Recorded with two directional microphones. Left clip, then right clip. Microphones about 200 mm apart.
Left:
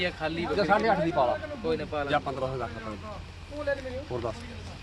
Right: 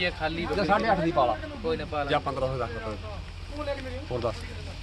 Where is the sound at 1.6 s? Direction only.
10° left (ahead or behind).